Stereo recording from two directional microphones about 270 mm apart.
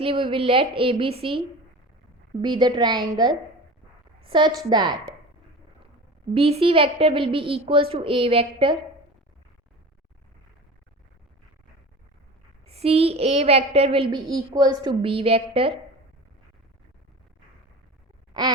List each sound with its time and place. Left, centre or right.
0.0 s a woman's voice: centre
2.4 s a woman's voice: centre
6.3 s a woman's voice: right
12.6 s a woman's voice: right